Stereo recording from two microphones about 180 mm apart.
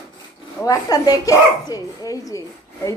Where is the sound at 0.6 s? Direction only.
20° left (ahead or behind).